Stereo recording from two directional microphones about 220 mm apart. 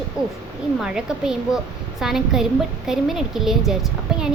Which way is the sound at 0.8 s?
5° right (ahead or behind).